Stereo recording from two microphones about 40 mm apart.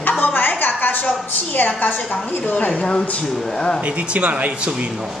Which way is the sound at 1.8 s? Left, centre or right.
Left.